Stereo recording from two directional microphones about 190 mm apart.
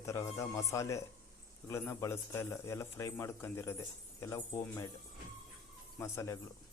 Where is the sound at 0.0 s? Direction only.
15° left (ahead or behind).